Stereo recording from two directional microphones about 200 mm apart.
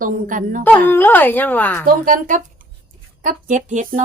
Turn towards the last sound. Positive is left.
turn(degrees=-40)  # may be behind; listen again after turning